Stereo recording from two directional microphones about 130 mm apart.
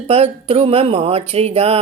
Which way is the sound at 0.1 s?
50° right (ahead or behind).